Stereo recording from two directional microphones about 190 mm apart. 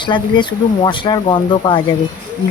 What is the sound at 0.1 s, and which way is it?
Speech, 25° left (ahead or behind).